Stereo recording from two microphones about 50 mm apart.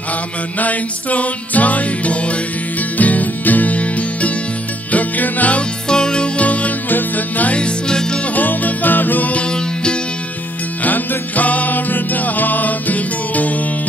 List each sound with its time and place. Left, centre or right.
0.6 s music: left
5.9 s music: centre; by 7.5 s left
7.5 s music: centre
8.4 s music: left
10.8 s music: left